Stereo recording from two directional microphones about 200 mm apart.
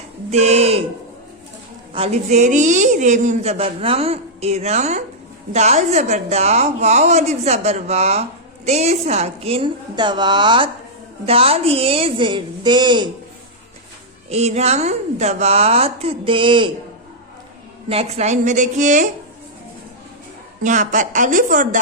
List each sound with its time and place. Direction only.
0.3 s a woman's voice: 30° right (ahead or behind)
1.9 s a woman's voice: 30° right (ahead or behind)
14.3 s a woman's voice: 30° right (ahead or behind)
17.8 s a woman's voice: 30° right (ahead or behind)
20.7 s a woman's voice: 40° right (ahead or behind)